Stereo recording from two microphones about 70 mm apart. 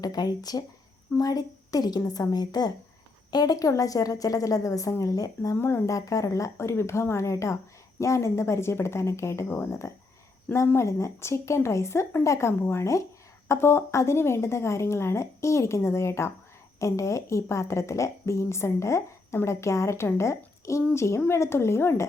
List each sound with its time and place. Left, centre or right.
0.0 s a woman's voice: left
5.5 s a woman's voice: left
5.8 s speech: left
9.8 s a woman's voice: left